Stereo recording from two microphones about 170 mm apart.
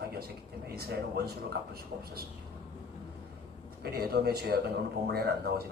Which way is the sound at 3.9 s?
65° right (ahead or behind).